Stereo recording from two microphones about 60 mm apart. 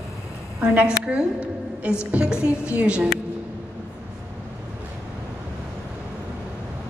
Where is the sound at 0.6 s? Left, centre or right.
Centre.